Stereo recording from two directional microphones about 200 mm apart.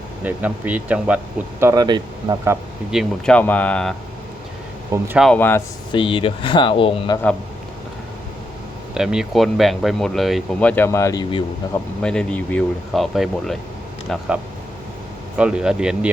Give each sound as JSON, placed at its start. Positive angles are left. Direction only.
{"t": 0.3, "sound": "speech", "side_deg": -10}
{"t": 2.9, "sound": "speech", "side_deg": 0}
{"t": 4.9, "sound": "speech", "side_deg": -5}
{"t": 5.3, "sound": "speech", "side_deg": 10}
{"t": 5.9, "sound": "speech", "side_deg": 25}
{"t": 9.0, "sound": "speech", "side_deg": -5}
{"t": 11.7, "sound": "speech", "side_deg": 5}
{"t": 15.4, "sound": "speech", "side_deg": -5}